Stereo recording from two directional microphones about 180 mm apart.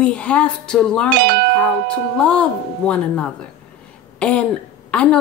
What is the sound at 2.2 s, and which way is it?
A woman's voice, 5° left (ahead or behind).